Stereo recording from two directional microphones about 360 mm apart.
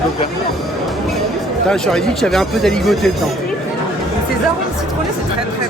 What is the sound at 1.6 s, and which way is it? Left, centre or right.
Speech, centre.